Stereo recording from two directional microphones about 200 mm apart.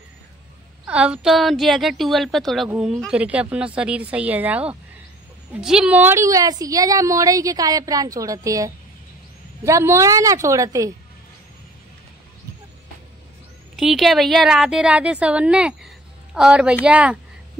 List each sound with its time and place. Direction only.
0.8 s a woman's voice: 5° right (ahead or behind)
13.7 s speech: centre (ahead or behind)